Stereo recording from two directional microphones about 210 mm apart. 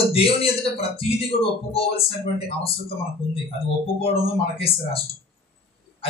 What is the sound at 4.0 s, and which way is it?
A man's voice, 25° left (ahead or behind).